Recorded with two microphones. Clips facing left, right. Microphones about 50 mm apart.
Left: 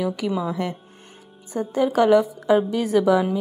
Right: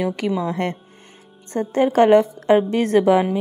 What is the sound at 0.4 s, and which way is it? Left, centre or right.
A woman's voice, right.